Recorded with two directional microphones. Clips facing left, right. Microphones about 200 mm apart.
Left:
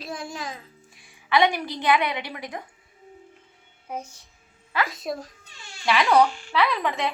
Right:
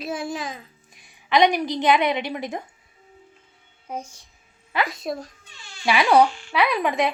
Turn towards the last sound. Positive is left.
turn(degrees=-15)  # may be behind; listen again after turning